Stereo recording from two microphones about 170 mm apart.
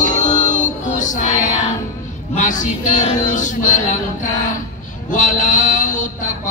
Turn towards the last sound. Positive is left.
turn(degrees=50)  # may be behind; listen again after turning